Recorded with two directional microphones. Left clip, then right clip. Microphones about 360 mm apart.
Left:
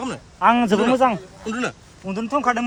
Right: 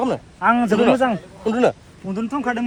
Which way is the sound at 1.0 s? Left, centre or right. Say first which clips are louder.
Left 2 dB; centre.